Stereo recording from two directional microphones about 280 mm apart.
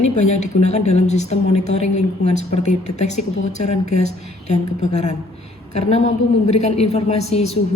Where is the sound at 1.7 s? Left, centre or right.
Left.